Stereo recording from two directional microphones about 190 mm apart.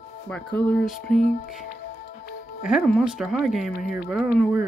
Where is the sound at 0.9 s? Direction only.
45° left (ahead or behind).